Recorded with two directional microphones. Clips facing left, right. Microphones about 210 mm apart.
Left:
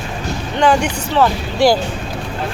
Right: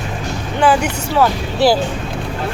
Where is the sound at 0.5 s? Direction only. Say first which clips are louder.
Even; 5° right (ahead or behind).